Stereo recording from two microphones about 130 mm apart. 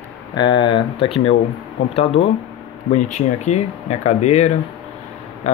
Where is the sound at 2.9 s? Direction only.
65° left (ahead or behind).